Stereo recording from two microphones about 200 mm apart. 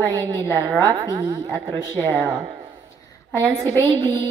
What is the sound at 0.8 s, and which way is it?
A woman's voice, 20° right (ahead or behind).